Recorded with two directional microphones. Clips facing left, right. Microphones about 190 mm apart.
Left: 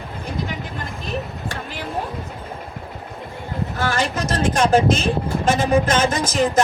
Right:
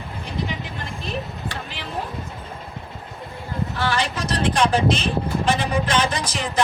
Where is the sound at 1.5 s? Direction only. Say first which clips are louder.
Left 3 dB; 45° left (ahead or behind).